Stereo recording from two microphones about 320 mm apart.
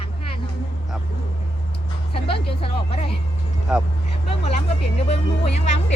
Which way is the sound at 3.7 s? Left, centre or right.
Centre.